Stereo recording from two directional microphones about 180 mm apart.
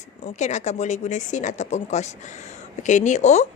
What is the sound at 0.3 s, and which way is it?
A woman's voice, 40° left (ahead or behind).